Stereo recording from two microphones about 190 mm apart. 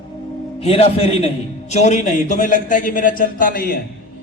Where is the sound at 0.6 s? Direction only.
30° left (ahead or behind).